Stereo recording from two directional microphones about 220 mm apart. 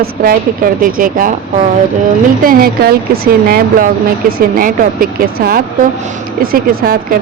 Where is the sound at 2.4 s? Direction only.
40° right (ahead or behind).